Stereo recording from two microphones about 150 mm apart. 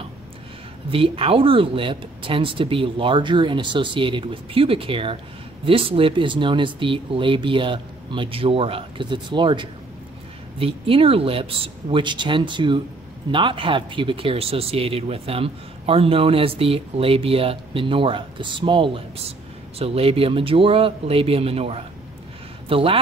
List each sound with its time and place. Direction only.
0.8 s speech: 35° right (ahead or behind)